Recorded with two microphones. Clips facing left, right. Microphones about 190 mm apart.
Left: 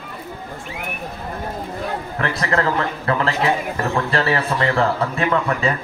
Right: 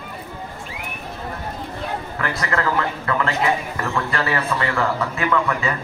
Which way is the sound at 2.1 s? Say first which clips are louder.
Left 4 dB; 35° left (ahead or behind).